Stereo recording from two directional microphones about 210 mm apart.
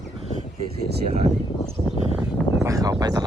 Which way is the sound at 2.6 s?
15° right (ahead or behind).